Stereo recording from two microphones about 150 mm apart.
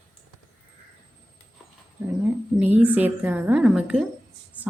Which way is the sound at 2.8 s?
10° right (ahead or behind).